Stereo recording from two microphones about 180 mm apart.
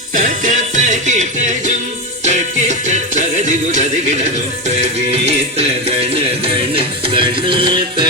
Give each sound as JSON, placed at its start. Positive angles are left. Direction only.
{"t": 0.1, "sound": "music", "side_deg": -45}